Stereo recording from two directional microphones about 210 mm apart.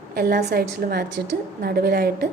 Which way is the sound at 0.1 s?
45° right (ahead or behind).